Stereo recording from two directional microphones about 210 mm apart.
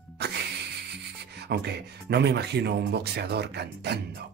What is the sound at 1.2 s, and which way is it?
Speech, 50° right (ahead or behind).